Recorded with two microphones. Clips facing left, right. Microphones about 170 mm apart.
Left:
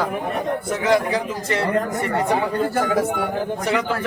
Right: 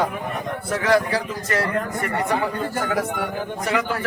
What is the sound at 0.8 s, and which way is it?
Speech, 20° left (ahead or behind).